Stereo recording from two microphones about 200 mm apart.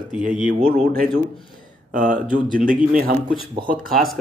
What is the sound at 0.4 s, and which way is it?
A man's voice, 40° right (ahead or behind).